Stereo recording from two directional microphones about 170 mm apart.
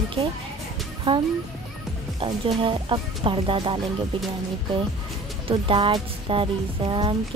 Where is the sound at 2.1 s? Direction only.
30° right (ahead or behind).